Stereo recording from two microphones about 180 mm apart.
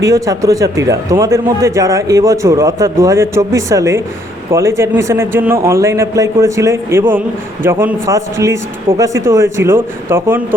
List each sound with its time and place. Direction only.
0.0 s a man's voice: 20° right (ahead or behind)